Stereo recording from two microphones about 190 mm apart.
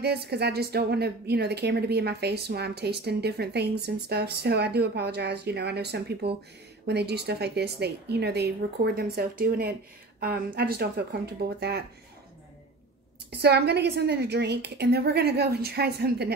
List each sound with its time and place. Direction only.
0.0 s speech: 60° right (ahead or behind)
13.4 s speech: 55° right (ahead or behind)